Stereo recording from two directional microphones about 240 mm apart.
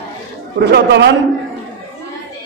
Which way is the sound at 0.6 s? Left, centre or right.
Right.